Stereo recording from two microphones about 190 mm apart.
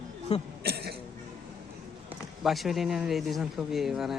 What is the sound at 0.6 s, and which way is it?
Cough, 55° right (ahead or behind).